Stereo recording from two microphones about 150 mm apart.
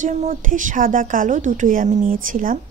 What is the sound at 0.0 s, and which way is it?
A woman's voice, 55° right (ahead or behind).